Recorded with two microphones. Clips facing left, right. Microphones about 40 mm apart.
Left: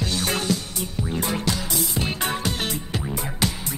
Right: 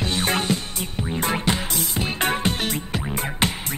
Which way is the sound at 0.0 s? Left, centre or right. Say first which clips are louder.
Right 2 dB; right.